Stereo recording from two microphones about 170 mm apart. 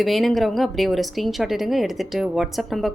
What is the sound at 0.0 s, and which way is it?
Speech, centre (ahead or behind).